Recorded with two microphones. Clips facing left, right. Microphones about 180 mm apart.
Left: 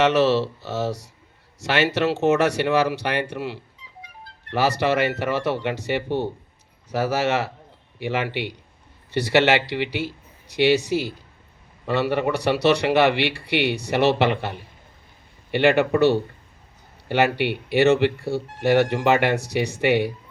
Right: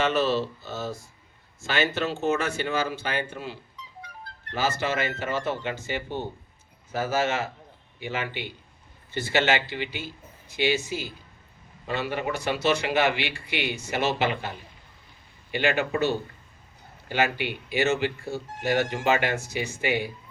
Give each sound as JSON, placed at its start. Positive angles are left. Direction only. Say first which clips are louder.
{"t": 0.0, "sound": "speech", "louder": "left 6 dB", "side_deg": 75}